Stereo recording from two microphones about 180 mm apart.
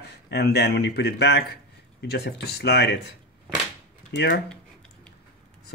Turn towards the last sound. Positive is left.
turn(degrees=70)  # may be behind; listen again after turning